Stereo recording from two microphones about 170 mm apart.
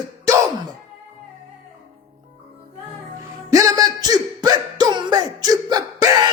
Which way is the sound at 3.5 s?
20° right (ahead or behind).